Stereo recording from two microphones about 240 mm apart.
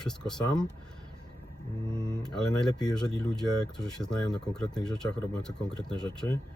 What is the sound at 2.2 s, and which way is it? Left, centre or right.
Speech, centre.